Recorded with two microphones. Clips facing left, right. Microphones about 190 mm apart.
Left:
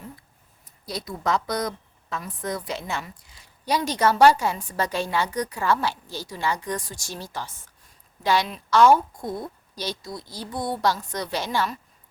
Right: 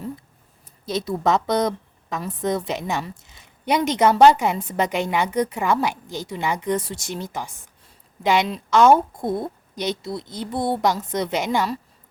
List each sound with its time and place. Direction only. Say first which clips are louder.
0.9 s a woman's voice: right 6 dB; 25° right (ahead or behind)